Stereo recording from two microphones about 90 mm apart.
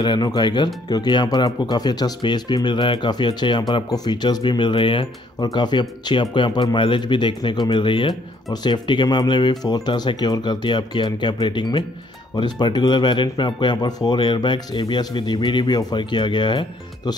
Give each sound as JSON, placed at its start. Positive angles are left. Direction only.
{"t": 0.0, "sound": "speech", "side_deg": 55}